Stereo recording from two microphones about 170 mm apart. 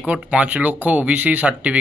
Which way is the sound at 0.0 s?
5° right (ahead or behind).